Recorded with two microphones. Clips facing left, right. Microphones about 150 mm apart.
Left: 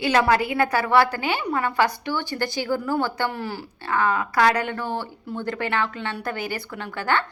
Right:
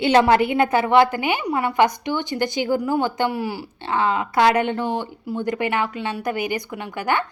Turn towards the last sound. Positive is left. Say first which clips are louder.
# right 2 dB
turn(degrees=-15)  # may be behind; listen again after turning